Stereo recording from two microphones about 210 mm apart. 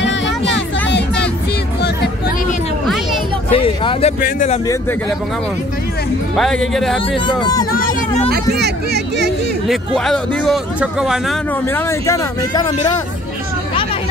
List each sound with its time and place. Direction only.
0.8 s music: 55° left (ahead or behind)
3.5 s speech: 25° left (ahead or behind)
4.2 s speech: 35° left (ahead or behind)
6.3 s speech: 5° left (ahead or behind)
8.3 s speech: 50° right (ahead or behind)
9.7 s speech: centre (ahead or behind)
11.6 s speech: 10° left (ahead or behind)